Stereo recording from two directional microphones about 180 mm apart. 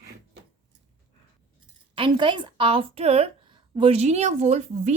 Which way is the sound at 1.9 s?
25° right (ahead or behind).